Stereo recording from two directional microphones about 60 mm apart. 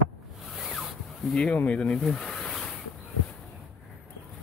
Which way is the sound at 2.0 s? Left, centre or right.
Centre.